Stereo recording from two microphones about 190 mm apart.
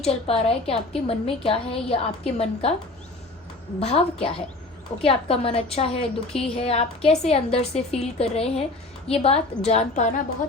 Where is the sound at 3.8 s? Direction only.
30° left (ahead or behind).